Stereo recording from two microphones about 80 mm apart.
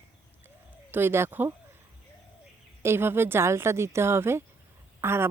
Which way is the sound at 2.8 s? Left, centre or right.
Right.